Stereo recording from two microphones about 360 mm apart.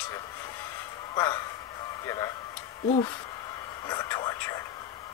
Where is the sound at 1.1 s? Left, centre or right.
Centre.